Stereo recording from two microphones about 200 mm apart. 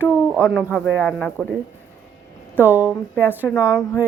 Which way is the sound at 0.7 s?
10° left (ahead or behind).